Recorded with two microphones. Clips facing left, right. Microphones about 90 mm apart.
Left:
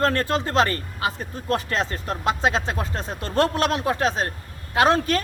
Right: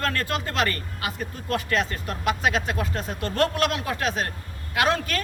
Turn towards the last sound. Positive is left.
turn(degrees=30)  # may be behind; listen again after turning